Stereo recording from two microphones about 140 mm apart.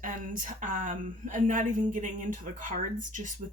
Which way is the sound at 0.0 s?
70° right (ahead or behind).